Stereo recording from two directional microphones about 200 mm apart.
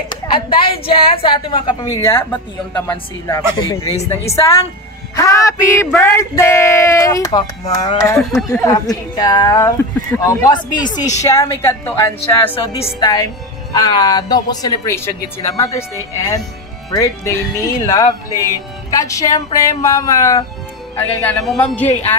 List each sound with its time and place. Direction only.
0.1 s a woman's voice: 25° left (ahead or behind)
12.5 s a woman's voice: 25° left (ahead or behind); by 21.8 s 5° left (ahead or behind)